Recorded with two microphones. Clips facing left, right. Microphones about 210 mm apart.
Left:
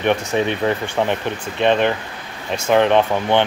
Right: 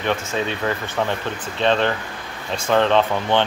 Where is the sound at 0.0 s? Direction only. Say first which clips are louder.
Left 5 dB; 20° left (ahead or behind).